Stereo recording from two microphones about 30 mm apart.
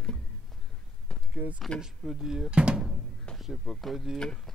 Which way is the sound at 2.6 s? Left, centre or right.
Right.